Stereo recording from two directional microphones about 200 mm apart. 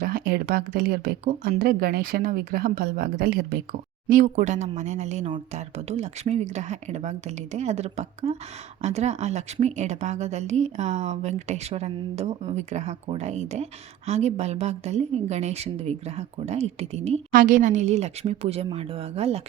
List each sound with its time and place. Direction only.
0.0 s a woman's voice: 50° right (ahead or behind); by 19.4 s 30° right (ahead or behind)